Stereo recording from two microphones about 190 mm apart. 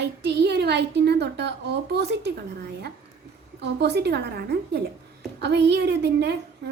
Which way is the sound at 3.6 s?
60° right (ahead or behind).